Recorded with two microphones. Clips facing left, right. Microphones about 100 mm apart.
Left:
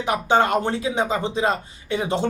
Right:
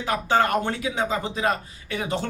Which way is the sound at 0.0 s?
20° left (ahead or behind).